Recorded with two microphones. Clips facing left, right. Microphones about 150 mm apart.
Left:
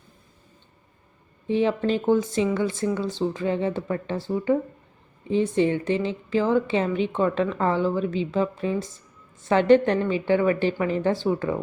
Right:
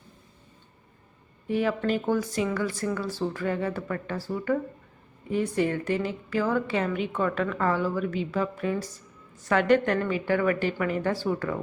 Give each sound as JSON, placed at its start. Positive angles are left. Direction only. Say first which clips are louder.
{"t": 1.5, "sound": "a woman's voice", "louder": "left 3 dB", "side_deg": 25}